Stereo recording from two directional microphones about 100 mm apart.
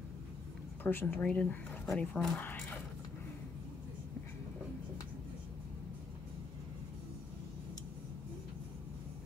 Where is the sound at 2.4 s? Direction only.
20° left (ahead or behind).